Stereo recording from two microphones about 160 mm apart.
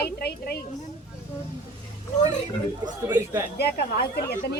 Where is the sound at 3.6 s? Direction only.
90° left.